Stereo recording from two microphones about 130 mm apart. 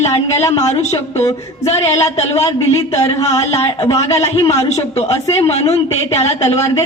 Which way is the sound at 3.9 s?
20° left (ahead or behind).